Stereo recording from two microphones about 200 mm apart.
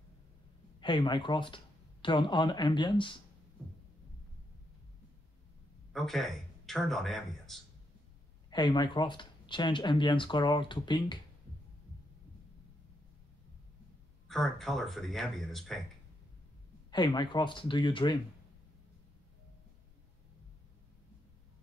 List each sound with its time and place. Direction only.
0.7 s speech: 25° left (ahead or behind)
5.9 s a man's voice: centre (ahead or behind)
8.5 s speech: 20° left (ahead or behind)
14.2 s a man's voice: centre (ahead or behind)
16.9 s speech: 20° left (ahead or behind)